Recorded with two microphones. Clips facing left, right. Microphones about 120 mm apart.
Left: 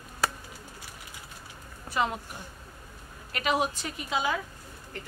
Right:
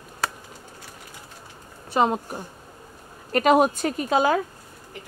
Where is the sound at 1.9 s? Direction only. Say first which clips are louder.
Right 8 dB; 40° right (ahead or behind).